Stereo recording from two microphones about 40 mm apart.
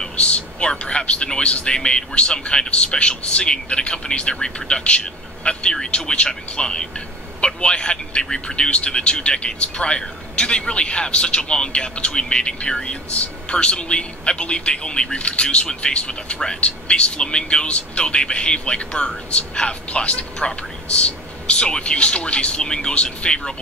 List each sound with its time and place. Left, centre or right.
0.2 s speech: left